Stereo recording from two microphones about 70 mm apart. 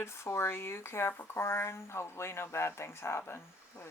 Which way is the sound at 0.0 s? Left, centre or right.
Left.